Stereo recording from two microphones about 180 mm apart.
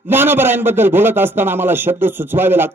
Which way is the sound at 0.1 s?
10° right (ahead or behind).